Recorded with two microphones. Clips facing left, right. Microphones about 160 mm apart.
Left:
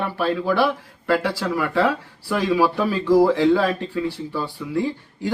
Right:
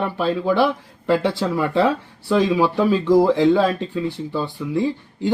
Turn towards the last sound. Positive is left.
turn(degrees=-20)  # may be behind; listen again after turning